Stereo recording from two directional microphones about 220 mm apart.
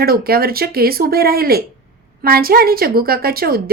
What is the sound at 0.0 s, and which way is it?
A woman's voice, 45° right (ahead or behind).